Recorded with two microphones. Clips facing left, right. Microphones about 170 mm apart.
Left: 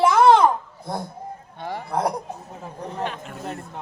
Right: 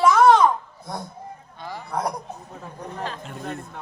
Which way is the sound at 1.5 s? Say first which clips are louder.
Left 5 dB; 65° left (ahead or behind).